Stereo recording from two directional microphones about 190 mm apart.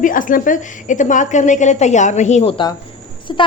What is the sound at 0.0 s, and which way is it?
A woman's voice, 45° left (ahead or behind).